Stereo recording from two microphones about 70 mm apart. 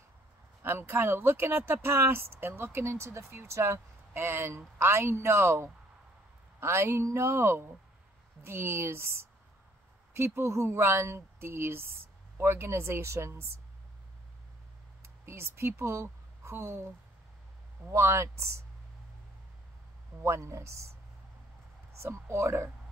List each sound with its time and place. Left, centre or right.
0.6 s speech: right
15.0 s speech: right
20.2 s speech: right
21.9 s speech: right